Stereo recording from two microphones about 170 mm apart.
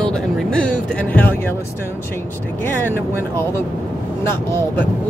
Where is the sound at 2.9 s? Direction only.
15° left (ahead or behind).